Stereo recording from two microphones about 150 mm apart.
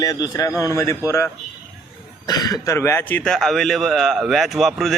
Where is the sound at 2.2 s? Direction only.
25° left (ahead or behind).